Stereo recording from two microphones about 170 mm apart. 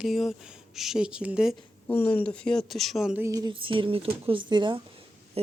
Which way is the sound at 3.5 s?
30° right (ahead or behind).